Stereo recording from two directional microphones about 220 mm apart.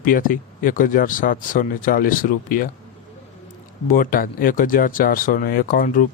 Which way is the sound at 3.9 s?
40° left (ahead or behind).